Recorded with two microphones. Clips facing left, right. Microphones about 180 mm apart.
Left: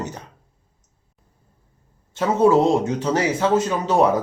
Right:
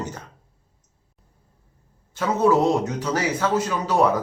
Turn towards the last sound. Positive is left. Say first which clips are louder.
# left 4 dB
turn(degrees=25)  # may be behind; listen again after turning